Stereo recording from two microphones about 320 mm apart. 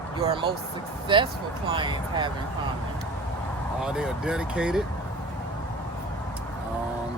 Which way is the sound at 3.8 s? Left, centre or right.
Centre.